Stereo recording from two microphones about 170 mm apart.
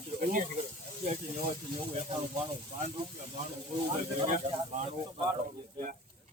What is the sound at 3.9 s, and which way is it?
Speech, 40° right (ahead or behind).